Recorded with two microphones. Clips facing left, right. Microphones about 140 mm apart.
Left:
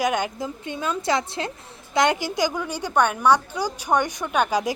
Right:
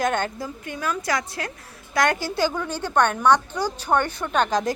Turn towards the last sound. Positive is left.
turn(degrees=10)  # may be behind; listen again after turning